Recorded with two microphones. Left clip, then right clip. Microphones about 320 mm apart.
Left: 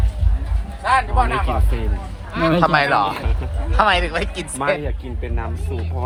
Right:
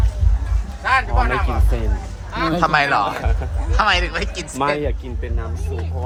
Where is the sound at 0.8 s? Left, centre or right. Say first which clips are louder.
Left 1 dB; centre.